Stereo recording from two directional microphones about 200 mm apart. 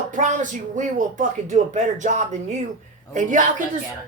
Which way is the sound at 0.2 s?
40° right (ahead or behind).